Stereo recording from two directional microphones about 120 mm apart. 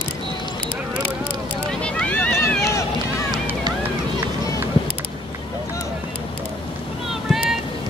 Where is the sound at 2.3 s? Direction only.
25° left (ahead or behind).